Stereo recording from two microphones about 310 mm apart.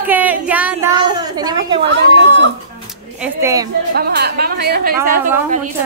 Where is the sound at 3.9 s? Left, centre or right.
Right.